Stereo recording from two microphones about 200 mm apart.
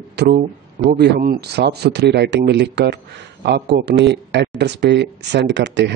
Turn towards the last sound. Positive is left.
turn(degrees=-60)  # may be behind; listen again after turning